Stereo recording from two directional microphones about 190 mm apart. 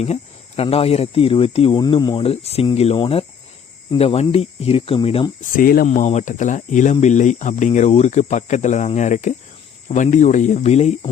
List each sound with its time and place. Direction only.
0.0 s speech: 35° left (ahead or behind)
5.5 s speech: 50° left (ahead or behind)